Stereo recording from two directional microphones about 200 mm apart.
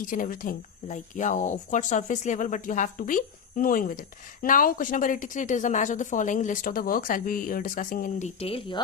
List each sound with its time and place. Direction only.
0.1 s speech: 45° left (ahead or behind)
8.4 s speech: 30° left (ahead or behind)